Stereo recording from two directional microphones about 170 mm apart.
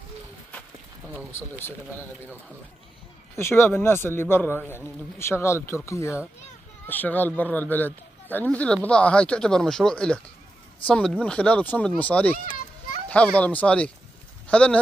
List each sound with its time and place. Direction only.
3.3 s speech: 15° left (ahead or behind)